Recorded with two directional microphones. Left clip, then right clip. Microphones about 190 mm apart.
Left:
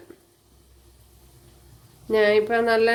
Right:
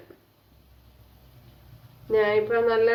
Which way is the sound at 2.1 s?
55° left (ahead or behind).